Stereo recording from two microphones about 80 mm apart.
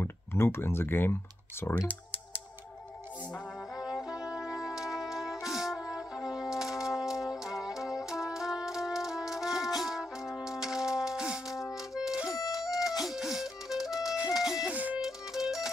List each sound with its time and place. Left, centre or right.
0.0 s speech: left
3.8 s brass instrument: centre
9.8 s music: centre
12.3 s music: left
13.0 s music: centre
14.7 s music: centre
15.0 s music: centre